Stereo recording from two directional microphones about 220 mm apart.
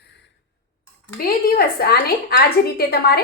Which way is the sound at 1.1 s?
40° left (ahead or behind).